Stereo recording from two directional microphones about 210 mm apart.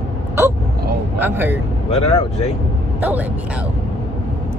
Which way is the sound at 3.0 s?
5° right (ahead or behind).